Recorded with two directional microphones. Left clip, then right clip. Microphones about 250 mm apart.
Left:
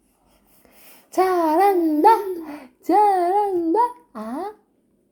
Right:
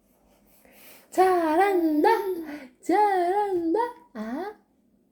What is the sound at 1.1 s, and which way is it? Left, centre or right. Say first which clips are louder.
A child's voice: left 3 dB; left.